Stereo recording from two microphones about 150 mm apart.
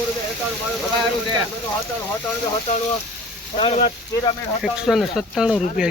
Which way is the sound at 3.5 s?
40° left (ahead or behind).